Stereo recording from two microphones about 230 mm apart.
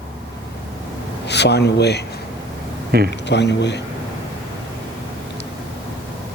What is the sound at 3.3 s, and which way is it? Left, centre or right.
Speech, left.